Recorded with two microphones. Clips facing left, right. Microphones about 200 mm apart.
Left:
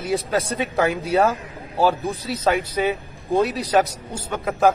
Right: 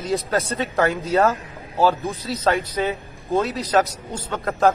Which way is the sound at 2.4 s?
10° left (ahead or behind).